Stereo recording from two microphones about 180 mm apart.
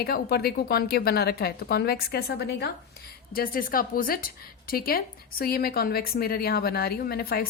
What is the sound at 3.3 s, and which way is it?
A woman's voice, 55° left (ahead or behind).